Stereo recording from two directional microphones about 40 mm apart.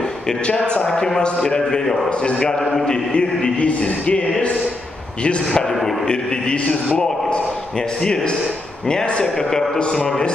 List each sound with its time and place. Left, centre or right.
0.5 s a man's voice: left
5.5 s a man's voice: centre
7.0 s a sound: left
8.0 s a man's voice: centre
9.2 s a man's voice: centre